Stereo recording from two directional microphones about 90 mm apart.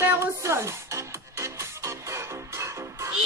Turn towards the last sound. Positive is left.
turn(degrees=-30)  # may be behind; listen again after turning